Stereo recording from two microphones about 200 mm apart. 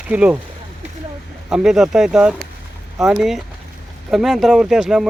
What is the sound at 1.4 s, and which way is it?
Speech, 5° right (ahead or behind).